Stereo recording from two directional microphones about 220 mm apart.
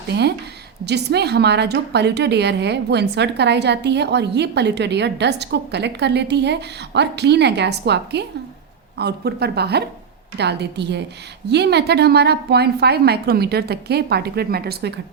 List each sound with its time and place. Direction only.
0.1 s a woman's voice: 50° right (ahead or behind)